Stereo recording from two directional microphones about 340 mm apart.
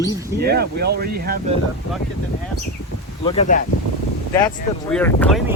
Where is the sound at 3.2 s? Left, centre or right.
Centre.